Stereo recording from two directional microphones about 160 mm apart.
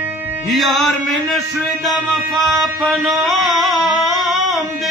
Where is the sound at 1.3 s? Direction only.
Centre (ahead or behind).